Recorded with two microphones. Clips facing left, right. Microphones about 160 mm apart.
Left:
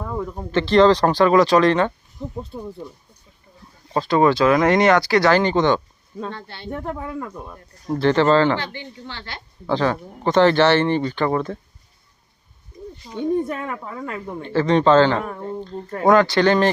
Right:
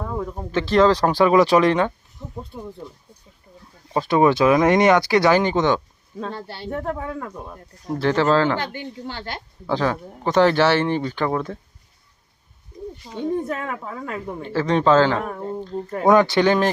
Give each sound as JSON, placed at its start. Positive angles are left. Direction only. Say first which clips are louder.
{"t": 0.0, "sound": "speech", "louder": "even", "side_deg": 0}
{"t": 3.9, "sound": "speech", "louder": "even", "side_deg": -10}
{"t": 6.3, "sound": "speech", "louder": "right 3 dB", "side_deg": -40}
{"t": 6.7, "sound": "speech", "louder": "right 1 dB", "side_deg": 0}
{"t": 8.5, "sound": "a woman's voice", "louder": "right 1 dB", "side_deg": -50}
{"t": 9.6, "sound": "speech", "louder": "left 2 dB", "side_deg": -5}
{"t": 13.2, "sound": "speech", "louder": "left 2 dB", "side_deg": 0}